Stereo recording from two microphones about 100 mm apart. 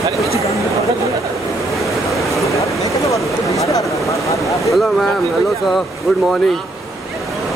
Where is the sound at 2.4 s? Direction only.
30° left (ahead or behind).